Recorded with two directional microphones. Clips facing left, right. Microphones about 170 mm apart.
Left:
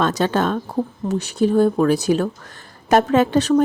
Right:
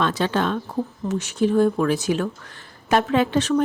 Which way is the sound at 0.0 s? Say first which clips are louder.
Left 3 dB; 40° left (ahead or behind).